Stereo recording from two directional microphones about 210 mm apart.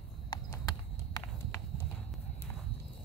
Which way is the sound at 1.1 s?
15° left (ahead or behind).